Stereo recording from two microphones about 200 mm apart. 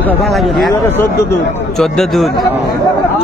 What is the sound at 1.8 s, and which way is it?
Speech, centre (ahead or behind).